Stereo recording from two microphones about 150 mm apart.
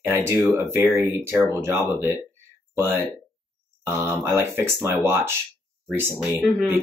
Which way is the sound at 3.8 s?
15° right (ahead or behind).